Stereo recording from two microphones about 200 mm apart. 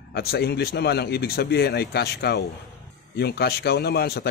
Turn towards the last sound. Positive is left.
turn(degrees=50)  # may be behind; listen again after turning